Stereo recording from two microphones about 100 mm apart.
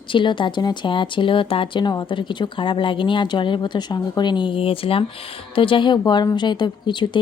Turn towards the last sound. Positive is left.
turn(degrees=50)  # may be behind; listen again after turning